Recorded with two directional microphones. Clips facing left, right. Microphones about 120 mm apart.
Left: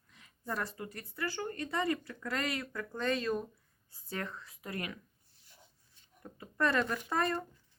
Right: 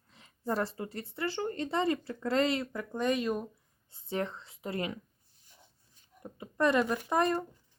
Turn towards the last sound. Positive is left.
turn(degrees=-20)  # may be behind; listen again after turning